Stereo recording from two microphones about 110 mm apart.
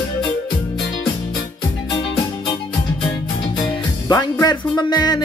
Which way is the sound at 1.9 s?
45° left (ahead or behind).